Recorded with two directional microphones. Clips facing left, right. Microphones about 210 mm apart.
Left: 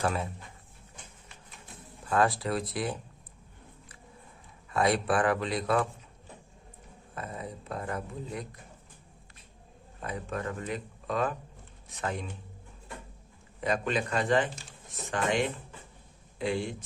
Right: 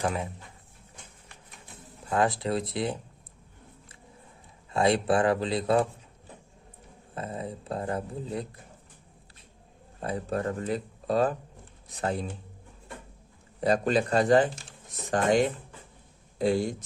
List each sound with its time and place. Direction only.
0.0 s speech: 15° right (ahead or behind)
2.0 s speech: 20° right (ahead or behind)
4.7 s speech: 25° right (ahead or behind)
7.1 s speech: 30° right (ahead or behind)
10.0 s speech: 35° right (ahead or behind)
13.6 s speech: 35° right (ahead or behind)